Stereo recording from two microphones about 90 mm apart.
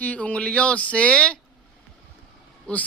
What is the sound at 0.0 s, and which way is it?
Speech, 15° left (ahead or behind).